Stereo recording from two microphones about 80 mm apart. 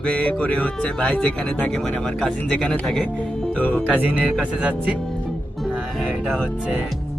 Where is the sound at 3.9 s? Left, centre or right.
Centre.